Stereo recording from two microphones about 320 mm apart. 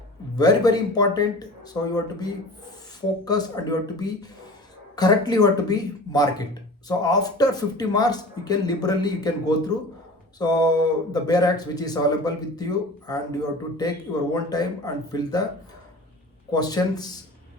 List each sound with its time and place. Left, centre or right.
0.3 s speech: centre
16.5 s speech: centre